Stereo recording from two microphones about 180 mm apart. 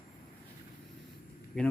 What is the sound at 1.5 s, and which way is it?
Speech, 5° left (ahead or behind).